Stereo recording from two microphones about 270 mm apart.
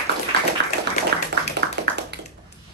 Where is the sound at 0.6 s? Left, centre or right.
Right.